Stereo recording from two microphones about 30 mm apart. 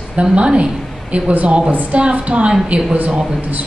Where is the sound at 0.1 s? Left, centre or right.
Right.